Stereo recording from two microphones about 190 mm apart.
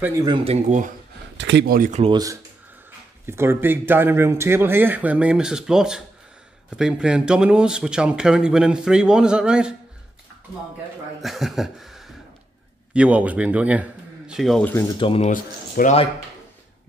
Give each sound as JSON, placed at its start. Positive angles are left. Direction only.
{"t": 0.0, "sound": "speech", "side_deg": -20}
{"t": 1.4, "sound": "speech", "side_deg": -65}
{"t": 2.0, "sound": "a man's voice", "side_deg": -20}
{"t": 11.1, "sound": "a man's voice", "side_deg": 0}
{"t": 15.0, "sound": "speech", "side_deg": 30}
{"t": 15.2, "sound": "speech", "side_deg": 45}